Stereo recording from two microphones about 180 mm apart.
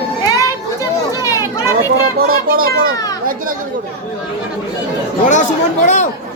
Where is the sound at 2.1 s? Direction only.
55° right (ahead or behind).